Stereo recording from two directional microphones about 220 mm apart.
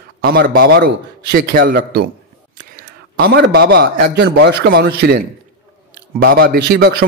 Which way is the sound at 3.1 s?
50° right (ahead or behind).